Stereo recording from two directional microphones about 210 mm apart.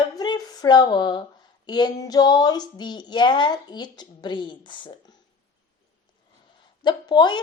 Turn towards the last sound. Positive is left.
turn(degrees=20)  # may be behind; listen again after turning